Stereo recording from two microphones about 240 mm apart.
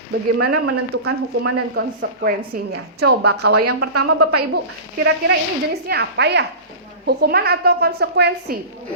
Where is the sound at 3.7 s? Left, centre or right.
Right.